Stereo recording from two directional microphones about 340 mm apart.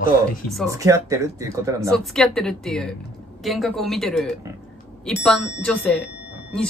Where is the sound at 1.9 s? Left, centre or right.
Centre.